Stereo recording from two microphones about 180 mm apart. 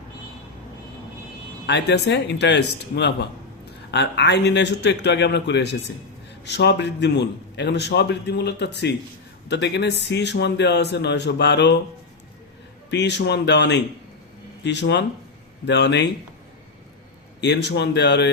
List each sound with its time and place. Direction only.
1.6 s a man's voice: 75° left (ahead or behind)
12.9 s a man's voice: 75° left (ahead or behind)
17.4 s a man's voice: 75° left (ahead or behind)